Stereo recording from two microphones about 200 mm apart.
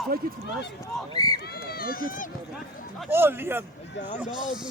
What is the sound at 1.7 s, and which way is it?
Speech, 50° left (ahead or behind).